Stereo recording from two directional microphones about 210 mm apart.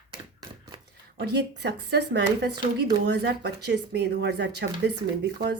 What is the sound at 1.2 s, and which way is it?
Speech, 50° right (ahead or behind).